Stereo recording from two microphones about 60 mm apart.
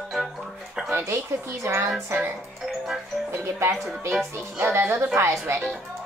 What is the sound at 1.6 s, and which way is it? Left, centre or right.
Speech, right.